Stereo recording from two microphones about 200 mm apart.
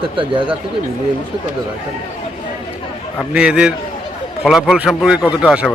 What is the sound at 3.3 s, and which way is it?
A man's voice, 5° right (ahead or behind).